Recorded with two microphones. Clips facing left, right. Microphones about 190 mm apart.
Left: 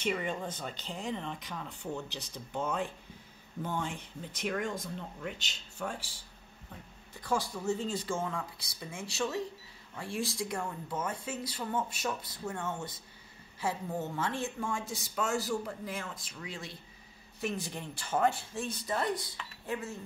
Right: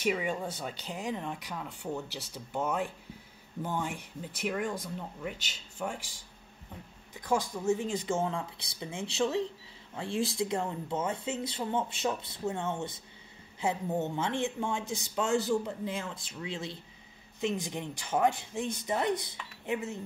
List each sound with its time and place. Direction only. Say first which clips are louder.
0.0 s speech: right 3 dB; 5° right (ahead or behind)
7.2 s speech: right 3 dB; 15° right (ahead or behind)